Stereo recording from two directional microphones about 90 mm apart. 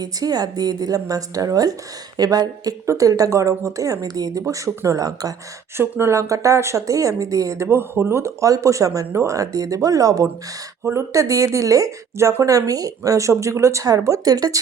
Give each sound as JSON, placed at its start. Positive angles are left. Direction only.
{"t": 0.0, "sound": "a woman's voice", "side_deg": -50}
{"t": 5.7, "sound": "speech", "side_deg": -25}